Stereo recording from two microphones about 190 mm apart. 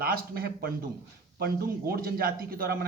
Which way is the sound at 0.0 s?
50° right (ahead or behind).